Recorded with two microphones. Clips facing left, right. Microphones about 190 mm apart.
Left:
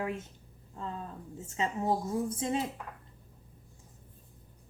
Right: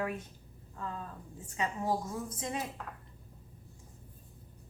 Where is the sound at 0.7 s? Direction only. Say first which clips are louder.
Left 1 dB; 25° left (ahead or behind).